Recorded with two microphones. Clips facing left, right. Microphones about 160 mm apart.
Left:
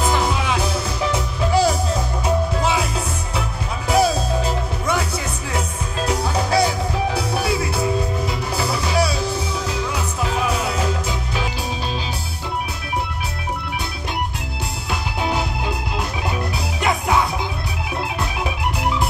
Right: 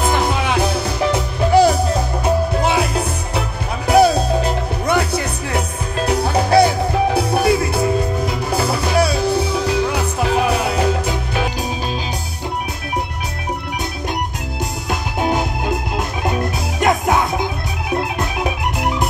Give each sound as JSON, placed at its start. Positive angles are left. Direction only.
{"t": 0.0, "sound": "music", "side_deg": -55}
{"t": 14.9, "sound": "music", "side_deg": -45}